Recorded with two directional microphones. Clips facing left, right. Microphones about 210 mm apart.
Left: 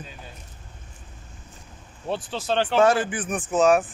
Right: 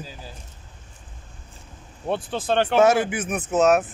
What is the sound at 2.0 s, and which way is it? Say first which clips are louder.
Speech: right 3 dB; 55° right (ahead or behind).